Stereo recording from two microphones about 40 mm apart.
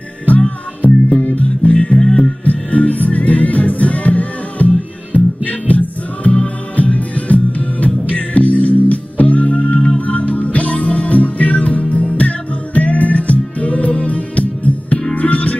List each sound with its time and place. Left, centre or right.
0.4 s music: left
2.0 s music: left
2.4 s music: left